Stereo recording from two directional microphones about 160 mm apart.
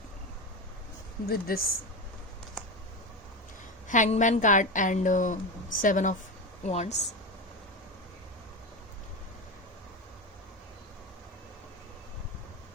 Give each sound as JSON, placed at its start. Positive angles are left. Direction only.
{"t": 1.3, "sound": "speech", "side_deg": 70}
{"t": 3.8, "sound": "a woman's voice", "side_deg": 50}
{"t": 6.6, "sound": "a woman's voice", "side_deg": 45}